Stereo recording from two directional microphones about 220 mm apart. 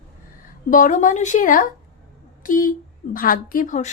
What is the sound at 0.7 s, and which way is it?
A woman's voice, 35° left (ahead or behind).